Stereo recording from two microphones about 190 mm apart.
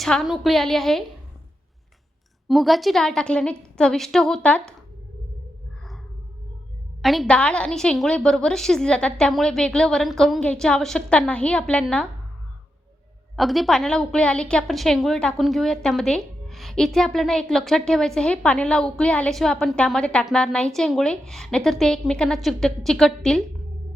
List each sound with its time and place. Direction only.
0.0 s a woman's voice: centre (ahead or behind)
2.5 s a woman's voice: centre (ahead or behind)
7.0 s a woman's voice: centre (ahead or behind)
13.3 s a woman's voice: centre (ahead or behind)